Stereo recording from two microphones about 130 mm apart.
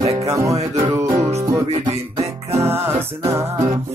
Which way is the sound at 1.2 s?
55° right (ahead or behind).